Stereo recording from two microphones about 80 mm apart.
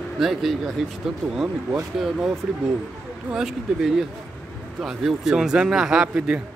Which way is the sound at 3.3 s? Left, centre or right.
Centre.